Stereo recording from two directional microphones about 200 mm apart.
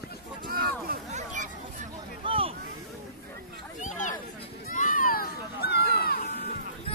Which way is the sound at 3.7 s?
40° left (ahead or behind).